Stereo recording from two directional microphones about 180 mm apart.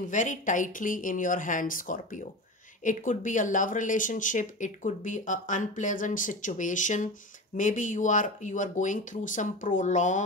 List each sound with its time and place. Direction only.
0.1 s speech: 45° left (ahead or behind)